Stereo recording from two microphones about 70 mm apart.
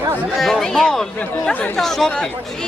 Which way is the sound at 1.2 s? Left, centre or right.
Left.